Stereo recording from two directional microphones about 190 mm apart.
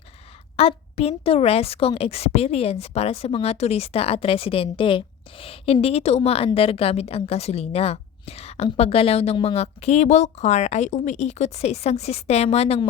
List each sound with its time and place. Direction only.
0.5 s a woman's voice: 30° left (ahead or behind)